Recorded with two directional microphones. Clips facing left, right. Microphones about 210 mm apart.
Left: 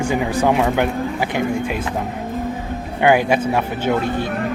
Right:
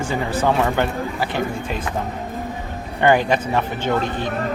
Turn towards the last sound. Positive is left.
turn(degrees=10)  # may be behind; listen again after turning